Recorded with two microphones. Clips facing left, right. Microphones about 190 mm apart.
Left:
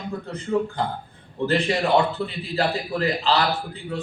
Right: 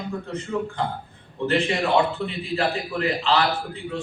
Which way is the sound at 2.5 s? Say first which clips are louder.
Left 1 dB; 35° left (ahead or behind).